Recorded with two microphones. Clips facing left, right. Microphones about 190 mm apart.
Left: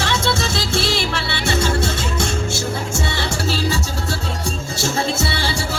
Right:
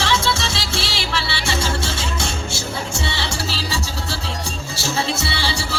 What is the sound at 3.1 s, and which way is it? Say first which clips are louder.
Music: left 4 dB; 45° left (ahead or behind).